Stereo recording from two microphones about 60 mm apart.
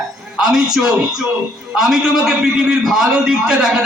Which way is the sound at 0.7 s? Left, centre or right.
Centre.